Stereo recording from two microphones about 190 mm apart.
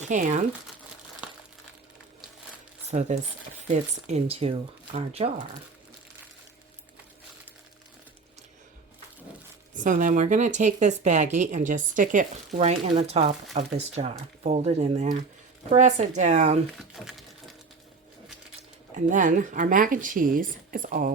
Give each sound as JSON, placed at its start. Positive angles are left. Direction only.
{"t": 0.0, "sound": "speech", "side_deg": -40}
{"t": 2.9, "sound": "speech", "side_deg": -40}
{"t": 9.7, "sound": "speech", "side_deg": -45}
{"t": 16.7, "sound": "speech", "side_deg": 0}
{"t": 18.9, "sound": "speech", "side_deg": -40}